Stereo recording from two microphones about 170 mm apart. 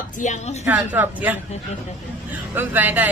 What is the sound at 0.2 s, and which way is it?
Speech, 45° left (ahead or behind).